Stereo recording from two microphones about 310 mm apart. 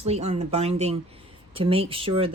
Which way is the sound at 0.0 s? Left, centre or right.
Centre.